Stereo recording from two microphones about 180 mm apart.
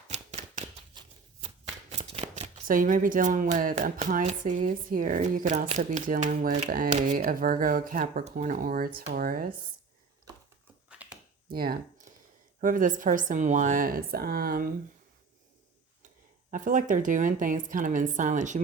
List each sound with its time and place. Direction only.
0.1 s a sound: 40° right (ahead or behind)
1.9 s shuffling cards: 35° right (ahead or behind)
2.6 s speech: 50° right (ahead or behind)
8.5 s speech: 55° right (ahead or behind)
10.8 s a sound: 5° right (ahead or behind)
11.5 s speech: 55° right (ahead or behind)
16.5 s speech: 50° right (ahead or behind)